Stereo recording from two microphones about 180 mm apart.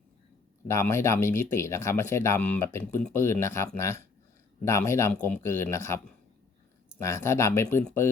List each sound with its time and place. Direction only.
0.7 s speech: 15° left (ahead or behind)
7.0 s speech: 15° left (ahead or behind)